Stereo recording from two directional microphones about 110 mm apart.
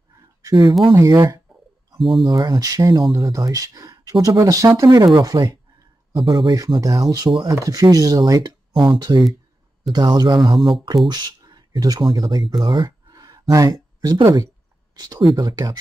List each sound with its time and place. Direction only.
0.4 s a sound: 30° right (ahead or behind)
0.9 s speech: 30° right (ahead or behind)
2.0 s speech: centre (ahead or behind)
2.2 s speech: 35° right (ahead or behind)
6.2 s speech: 45° right (ahead or behind)
6.6 s speech: 35° right (ahead or behind)